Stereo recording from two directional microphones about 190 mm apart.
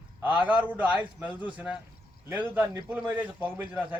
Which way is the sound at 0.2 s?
10° right (ahead or behind).